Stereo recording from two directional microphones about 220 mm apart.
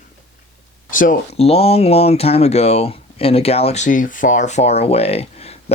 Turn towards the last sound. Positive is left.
turn(degrees=30)  # may be behind; listen again after turning